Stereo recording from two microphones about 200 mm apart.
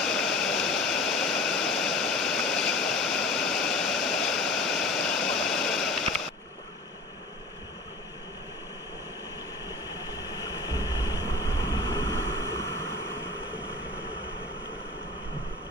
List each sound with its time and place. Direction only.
0.0 s a sound: centre (ahead or behind)
10.3 s vehicle: 20° left (ahead or behind)
12.7 s vehicle: 75° right (ahead or behind)